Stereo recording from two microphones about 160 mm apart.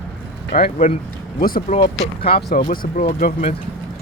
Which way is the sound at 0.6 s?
40° left (ahead or behind).